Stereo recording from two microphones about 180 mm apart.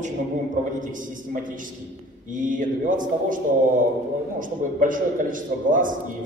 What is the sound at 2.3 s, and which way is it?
A man's voice, 45° right (ahead or behind).